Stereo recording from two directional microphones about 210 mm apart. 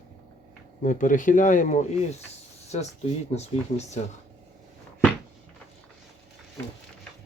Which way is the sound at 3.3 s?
30° left (ahead or behind).